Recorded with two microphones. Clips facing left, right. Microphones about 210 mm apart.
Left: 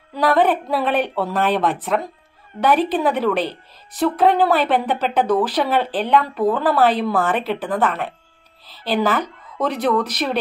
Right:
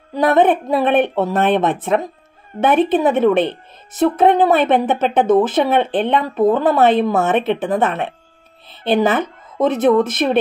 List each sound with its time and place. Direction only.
0.1 s a woman's voice: 20° right (ahead or behind)